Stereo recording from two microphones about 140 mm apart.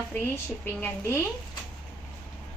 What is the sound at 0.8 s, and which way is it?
Speech, 15° left (ahead or behind).